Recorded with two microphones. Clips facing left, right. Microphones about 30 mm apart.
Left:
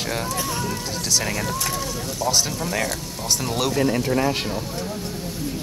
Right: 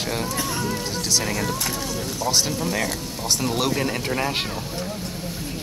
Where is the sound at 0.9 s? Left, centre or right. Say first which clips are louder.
Left 1 dB; centre.